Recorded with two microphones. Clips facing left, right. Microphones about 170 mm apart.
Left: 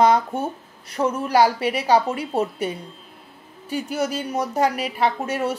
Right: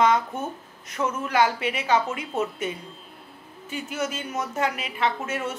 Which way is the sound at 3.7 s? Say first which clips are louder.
Left 5 dB; 35° left (ahead or behind).